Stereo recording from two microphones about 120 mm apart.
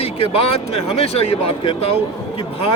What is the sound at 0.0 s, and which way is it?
Speech, 50° left (ahead or behind).